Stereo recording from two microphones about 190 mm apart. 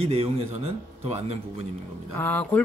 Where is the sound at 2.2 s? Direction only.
10° left (ahead or behind).